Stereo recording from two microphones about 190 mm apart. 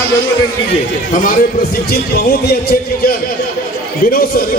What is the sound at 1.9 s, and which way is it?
A man's voice, 55° left (ahead or behind).